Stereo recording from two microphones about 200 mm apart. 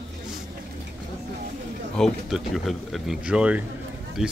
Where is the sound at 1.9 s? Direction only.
Centre (ahead or behind).